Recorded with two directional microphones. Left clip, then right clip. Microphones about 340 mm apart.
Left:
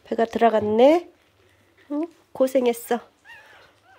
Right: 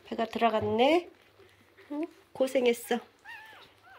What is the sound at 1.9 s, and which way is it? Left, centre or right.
Speech, left.